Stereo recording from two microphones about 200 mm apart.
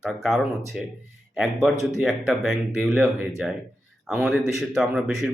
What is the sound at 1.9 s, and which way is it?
Speech, centre (ahead or behind).